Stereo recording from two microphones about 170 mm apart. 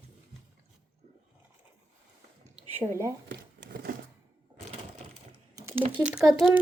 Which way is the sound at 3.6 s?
65° right (ahead or behind).